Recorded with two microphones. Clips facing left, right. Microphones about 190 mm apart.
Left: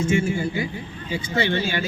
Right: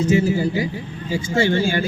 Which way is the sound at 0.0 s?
35° right (ahead or behind).